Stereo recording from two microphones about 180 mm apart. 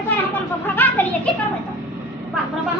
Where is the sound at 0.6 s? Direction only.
10° left (ahead or behind).